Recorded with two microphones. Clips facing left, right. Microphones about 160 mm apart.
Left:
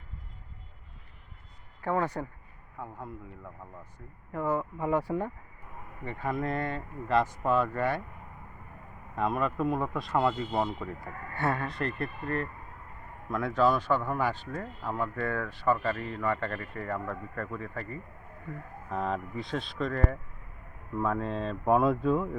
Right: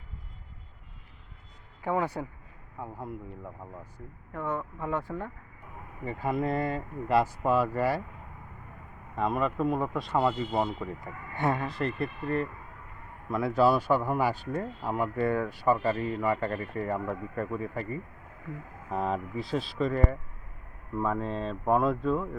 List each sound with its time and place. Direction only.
1.8 s a man's voice: 10° right (ahead or behind)
4.3 s speech: 5° left (ahead or behind)
6.1 s a man's voice: 5° right (ahead or behind)
9.1 s speech: centre (ahead or behind)
11.0 s a man's voice: 15° right (ahead or behind)
11.6 s a man's voice: centre (ahead or behind)
18.9 s speech: 5° right (ahead or behind)